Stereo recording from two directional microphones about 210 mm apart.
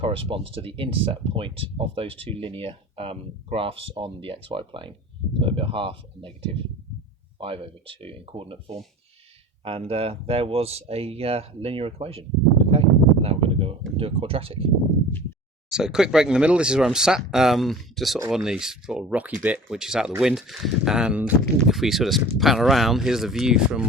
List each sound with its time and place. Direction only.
0.0 s speech: 25° right (ahead or behind)
15.7 s speech: 5° right (ahead or behind)